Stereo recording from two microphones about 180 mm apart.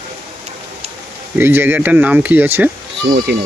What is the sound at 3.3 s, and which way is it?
Speech, 65° right (ahead or behind).